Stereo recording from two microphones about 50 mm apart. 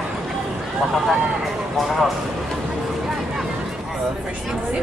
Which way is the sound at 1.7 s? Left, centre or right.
Centre.